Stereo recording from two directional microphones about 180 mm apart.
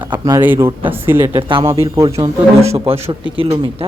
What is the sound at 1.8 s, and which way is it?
Speech, 15° right (ahead or behind).